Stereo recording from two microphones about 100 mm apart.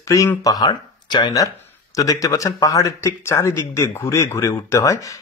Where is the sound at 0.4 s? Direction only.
40° left (ahead or behind).